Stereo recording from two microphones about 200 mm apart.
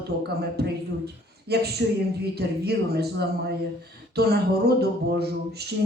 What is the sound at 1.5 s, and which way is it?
A woman's voice, 55° right (ahead or behind).